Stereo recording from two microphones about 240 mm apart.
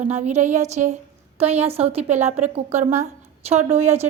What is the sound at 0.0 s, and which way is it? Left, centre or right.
A woman's voice, right.